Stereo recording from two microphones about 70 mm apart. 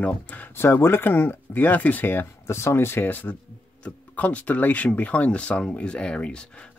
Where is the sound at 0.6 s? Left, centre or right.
Left.